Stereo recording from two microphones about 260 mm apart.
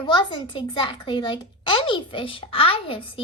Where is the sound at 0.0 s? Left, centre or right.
Centre.